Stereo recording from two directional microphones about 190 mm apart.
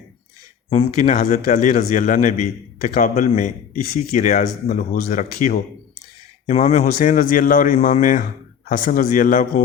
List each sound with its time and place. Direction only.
0.7 s a man's voice: 35° left (ahead or behind)